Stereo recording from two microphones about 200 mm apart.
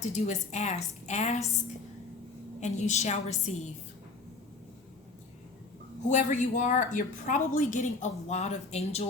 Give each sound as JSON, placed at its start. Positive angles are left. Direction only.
{"t": 0.0, "sound": "a woman's voice", "side_deg": 35}
{"t": 2.6, "sound": "a woman's voice", "side_deg": 35}
{"t": 6.1, "sound": "a woman's voice", "side_deg": 40}